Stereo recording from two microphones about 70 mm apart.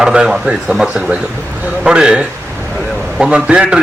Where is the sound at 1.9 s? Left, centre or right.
Centre.